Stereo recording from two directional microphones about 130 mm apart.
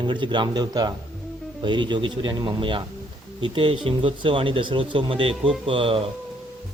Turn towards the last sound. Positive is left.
turn(degrees=-45)  # may be behind; listen again after turning